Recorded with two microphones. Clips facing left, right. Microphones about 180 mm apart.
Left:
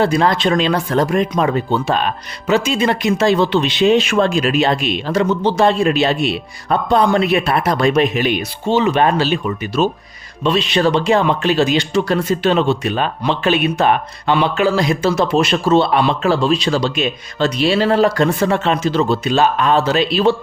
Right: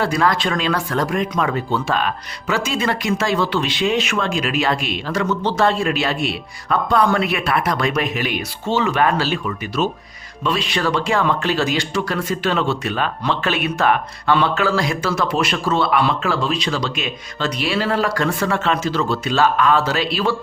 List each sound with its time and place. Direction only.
0.0 s speech: 25° left (ahead or behind)